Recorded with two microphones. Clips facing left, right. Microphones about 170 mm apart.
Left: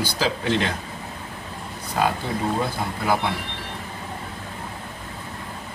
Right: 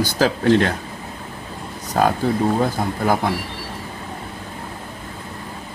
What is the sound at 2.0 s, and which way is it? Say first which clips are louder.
Speech: right 5 dB; 45° right (ahead or behind).